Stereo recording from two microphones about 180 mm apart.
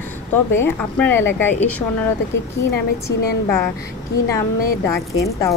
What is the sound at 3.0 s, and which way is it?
A woman's voice, 15° left (ahead or behind).